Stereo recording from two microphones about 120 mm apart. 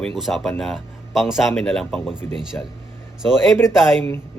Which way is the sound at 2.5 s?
20° left (ahead or behind).